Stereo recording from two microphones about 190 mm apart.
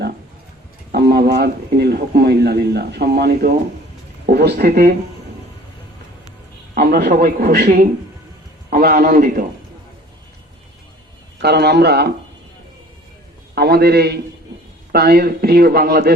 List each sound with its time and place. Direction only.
0.9 s a man's voice: 60° right (ahead or behind)
6.7 s a man's voice: 55° right (ahead or behind)
11.3 s a man's voice: 60° right (ahead or behind)
13.6 s a man's voice: 55° right (ahead or behind)